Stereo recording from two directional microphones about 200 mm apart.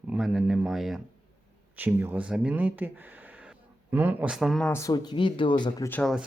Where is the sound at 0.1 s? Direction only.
Centre (ahead or behind).